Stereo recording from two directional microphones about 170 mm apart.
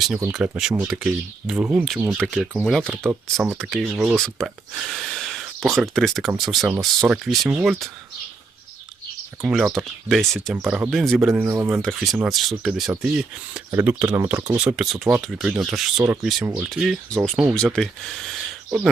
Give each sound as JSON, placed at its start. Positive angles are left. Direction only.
{"t": 0.3, "sound": "speech", "side_deg": -5}
{"t": 9.4, "sound": "speech", "side_deg": 0}
{"t": 11.4, "sound": "speech", "side_deg": -15}
{"t": 11.8, "sound": "speech", "side_deg": 0}
{"t": 14.3, "sound": "speech", "side_deg": -25}
{"t": 14.6, "sound": "speech", "side_deg": -5}